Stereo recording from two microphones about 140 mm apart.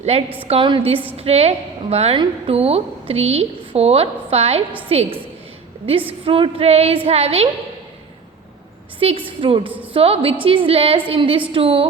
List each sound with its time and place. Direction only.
0.0 s a woman's voice: 50° right (ahead or behind)
9.0 s a woman's voice: 40° right (ahead or behind)